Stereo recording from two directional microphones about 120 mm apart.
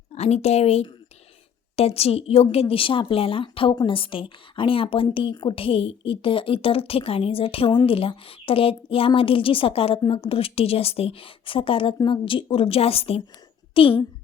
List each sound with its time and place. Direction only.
0.1 s a woman's voice: 65° left (ahead or behind)